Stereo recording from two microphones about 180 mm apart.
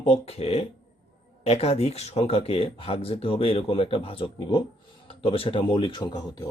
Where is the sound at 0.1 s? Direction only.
35° left (ahead or behind).